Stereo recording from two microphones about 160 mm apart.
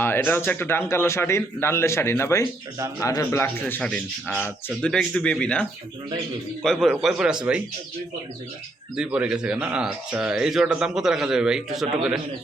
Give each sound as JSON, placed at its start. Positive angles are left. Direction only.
{"t": 0.0, "sound": "a man's voice", "side_deg": 15}
{"t": 9.0, "sound": "speech", "side_deg": -5}